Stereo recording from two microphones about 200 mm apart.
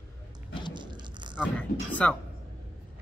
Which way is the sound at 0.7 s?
20° right (ahead or behind).